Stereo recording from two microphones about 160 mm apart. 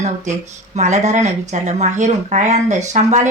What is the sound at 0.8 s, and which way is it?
Speech, 45° right (ahead or behind).